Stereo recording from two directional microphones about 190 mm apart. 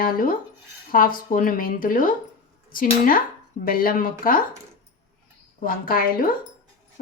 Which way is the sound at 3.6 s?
50° left (ahead or behind).